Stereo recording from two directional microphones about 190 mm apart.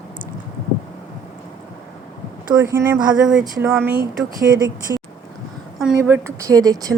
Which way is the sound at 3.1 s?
5° right (ahead or behind).